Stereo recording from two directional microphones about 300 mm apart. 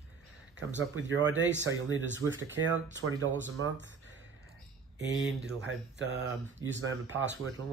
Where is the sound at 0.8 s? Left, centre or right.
Right.